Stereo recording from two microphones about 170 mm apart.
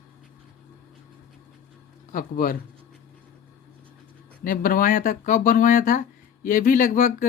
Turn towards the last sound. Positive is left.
turn(degrees=50)  # may be behind; listen again after turning